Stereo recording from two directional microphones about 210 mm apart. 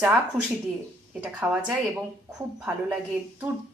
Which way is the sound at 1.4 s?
5° right (ahead or behind).